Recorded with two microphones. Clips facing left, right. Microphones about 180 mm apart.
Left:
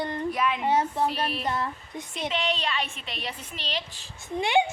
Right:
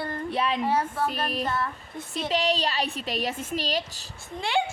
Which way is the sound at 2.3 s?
35° right (ahead or behind).